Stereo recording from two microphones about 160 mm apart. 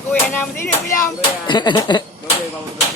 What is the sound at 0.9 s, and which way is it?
Speech, 25° left (ahead or behind).